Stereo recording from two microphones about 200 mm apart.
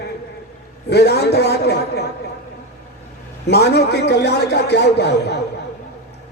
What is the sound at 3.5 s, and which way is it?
A man's voice, 55° left (ahead or behind).